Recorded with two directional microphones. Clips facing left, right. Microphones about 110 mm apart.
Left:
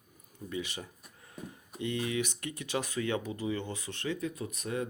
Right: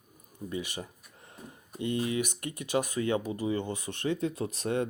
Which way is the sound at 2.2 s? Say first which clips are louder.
Right 2 dB; 50° right (ahead or behind).